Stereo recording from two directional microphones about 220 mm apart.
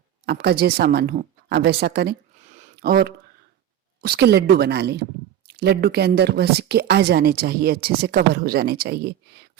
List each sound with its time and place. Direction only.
0.3 s speech: 45° right (ahead or behind)
2.4 s a sound: 30° right (ahead or behind)
4.0 s speech: 45° right (ahead or behind)